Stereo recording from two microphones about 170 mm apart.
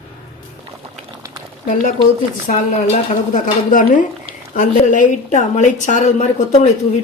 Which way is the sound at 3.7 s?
50° left (ahead or behind).